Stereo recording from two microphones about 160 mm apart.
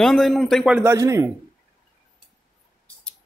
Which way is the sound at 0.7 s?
15° right (ahead or behind).